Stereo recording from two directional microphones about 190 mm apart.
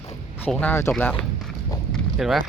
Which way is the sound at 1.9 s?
Centre (ahead or behind).